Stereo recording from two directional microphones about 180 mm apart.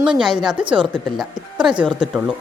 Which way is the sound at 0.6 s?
30° right (ahead or behind).